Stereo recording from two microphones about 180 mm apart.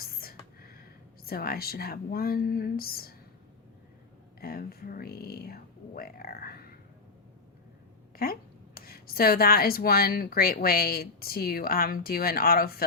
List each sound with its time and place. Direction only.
0.0 s a sound: 55° left (ahead or behind)
1.3 s a woman's voice: 55° left (ahead or behind)
4.4 s a woman's voice: 55° left (ahead or behind)
8.2 s a woman's voice: 55° left (ahead or behind)